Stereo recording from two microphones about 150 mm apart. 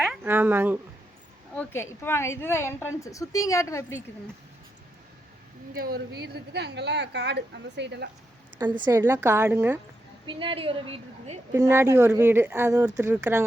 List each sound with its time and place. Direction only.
0.3 s speech: 15° right (ahead or behind)
1.5 s a woman's voice: 15° left (ahead or behind)
5.7 s a woman's voice: 85° right
8.5 s a woman's voice: 30° right (ahead or behind)
9.0 s speech: 20° right (ahead or behind)
10.2 s a woman's voice: 35° right (ahead or behind)
11.5 s speech: 20° right (ahead or behind)